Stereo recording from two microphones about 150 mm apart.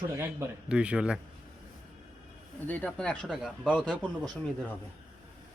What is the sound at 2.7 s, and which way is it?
Speech, 10° left (ahead or behind).